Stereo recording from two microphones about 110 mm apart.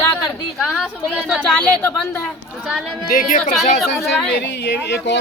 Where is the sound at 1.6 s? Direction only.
15° left (ahead or behind).